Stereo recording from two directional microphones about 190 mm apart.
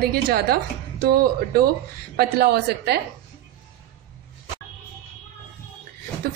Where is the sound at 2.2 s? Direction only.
60° right (ahead or behind).